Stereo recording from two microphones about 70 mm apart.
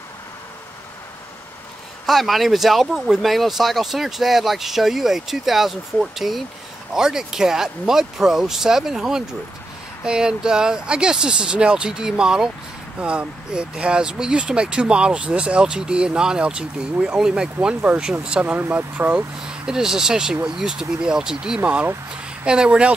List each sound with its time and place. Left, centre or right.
2.0 s speech: centre; by 19.2 s right
19.4 s speech: centre
21.6 s speech: centre